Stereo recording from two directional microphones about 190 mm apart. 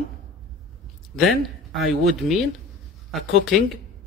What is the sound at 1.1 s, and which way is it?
Speech, centre (ahead or behind).